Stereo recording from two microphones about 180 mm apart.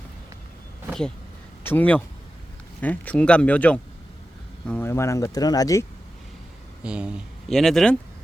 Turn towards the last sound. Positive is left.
turn(degrees=5)  # may be behind; listen again after turning